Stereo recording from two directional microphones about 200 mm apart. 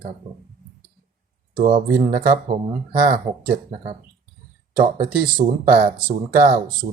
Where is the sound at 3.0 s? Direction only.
45° right (ahead or behind).